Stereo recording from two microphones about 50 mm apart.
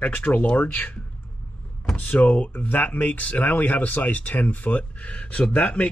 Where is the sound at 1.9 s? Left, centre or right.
Left.